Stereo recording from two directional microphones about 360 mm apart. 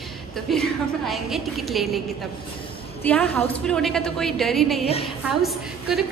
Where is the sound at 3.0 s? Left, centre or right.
Centre.